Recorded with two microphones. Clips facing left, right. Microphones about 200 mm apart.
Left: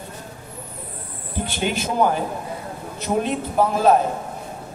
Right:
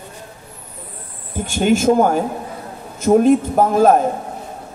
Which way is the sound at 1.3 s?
45° right (ahead or behind).